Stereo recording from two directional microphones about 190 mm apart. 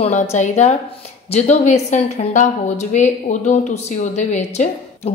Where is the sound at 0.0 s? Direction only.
35° left (ahead or behind).